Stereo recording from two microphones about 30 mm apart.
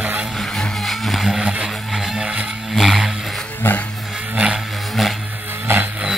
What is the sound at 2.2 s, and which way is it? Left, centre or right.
Vehicle, right.